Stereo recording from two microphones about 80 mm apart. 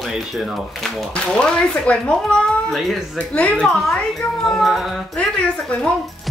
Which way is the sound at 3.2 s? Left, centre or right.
Centre.